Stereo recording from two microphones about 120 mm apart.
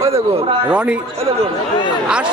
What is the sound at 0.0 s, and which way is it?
Speech, 55° right (ahead or behind).